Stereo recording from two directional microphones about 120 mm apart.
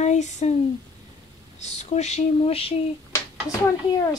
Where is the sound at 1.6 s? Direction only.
70° left (ahead or behind).